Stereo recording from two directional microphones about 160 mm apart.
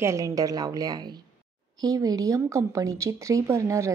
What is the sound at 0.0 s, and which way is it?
A woman's voice, 20° right (ahead or behind).